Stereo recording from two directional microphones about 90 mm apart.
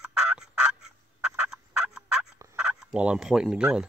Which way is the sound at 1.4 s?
5° right (ahead or behind).